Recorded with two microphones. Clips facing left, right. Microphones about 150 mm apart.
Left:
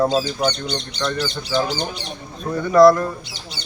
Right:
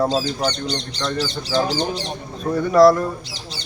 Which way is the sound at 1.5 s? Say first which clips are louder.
Right 2 dB; 35° right (ahead or behind).